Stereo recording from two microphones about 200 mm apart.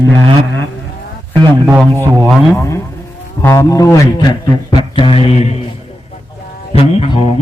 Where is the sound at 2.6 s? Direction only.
15° left (ahead or behind).